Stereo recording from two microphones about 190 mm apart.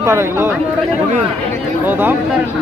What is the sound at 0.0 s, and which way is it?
Speech, 15° right (ahead or behind).